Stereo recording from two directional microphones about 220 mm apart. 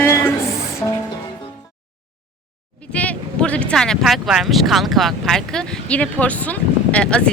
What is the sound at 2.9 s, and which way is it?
Speech, 5° left (ahead or behind).